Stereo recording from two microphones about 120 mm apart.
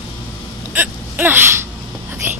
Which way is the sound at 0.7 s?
15° right (ahead or behind).